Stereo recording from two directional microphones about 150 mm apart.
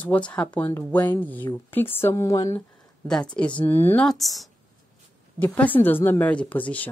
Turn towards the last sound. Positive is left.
turn(degrees=10)  # may be behind; listen again after turning